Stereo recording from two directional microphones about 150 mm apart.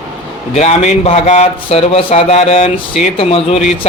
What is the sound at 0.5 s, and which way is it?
A man's voice, 50° left (ahead or behind).